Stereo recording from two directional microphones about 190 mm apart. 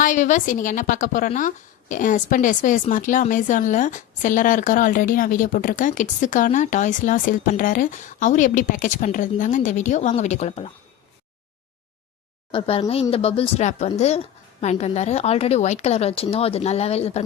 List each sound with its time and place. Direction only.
0.0 s a woman's voice: 40° left (ahead or behind)
12.5 s a woman's voice: 30° left (ahead or behind)